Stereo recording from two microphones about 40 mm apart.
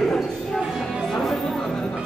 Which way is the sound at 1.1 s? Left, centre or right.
Centre.